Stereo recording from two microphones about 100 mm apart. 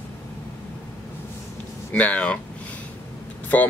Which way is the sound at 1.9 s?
15° left (ahead or behind).